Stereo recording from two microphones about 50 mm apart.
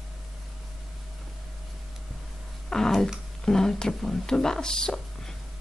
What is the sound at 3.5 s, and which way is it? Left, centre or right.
Speech, centre.